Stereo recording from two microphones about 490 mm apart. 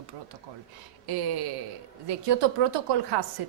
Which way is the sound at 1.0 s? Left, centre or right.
Right.